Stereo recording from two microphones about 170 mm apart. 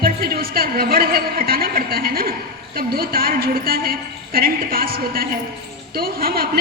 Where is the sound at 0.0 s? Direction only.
60° right (ahead or behind).